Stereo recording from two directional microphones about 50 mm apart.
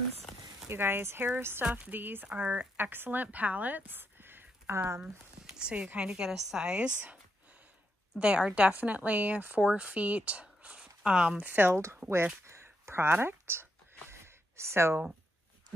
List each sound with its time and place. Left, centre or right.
0.7 s speech: right
1.6 s speech: right
2.2 s speech: right
2.8 s speech: right
5.0 s a sound: centre
5.9 s a woman's voice: centre
8.4 s speech: right
9.7 s speech: right
11.5 s speech: right
12.0 s a woman's voice: centre
12.4 s a sound: right
13.2 s speech: right
14.1 s a sound: right